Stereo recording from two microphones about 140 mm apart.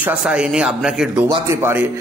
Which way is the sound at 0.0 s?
5° right (ahead or behind).